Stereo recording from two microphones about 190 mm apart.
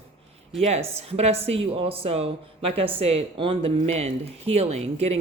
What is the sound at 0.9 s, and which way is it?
Speech, 35° right (ahead or behind).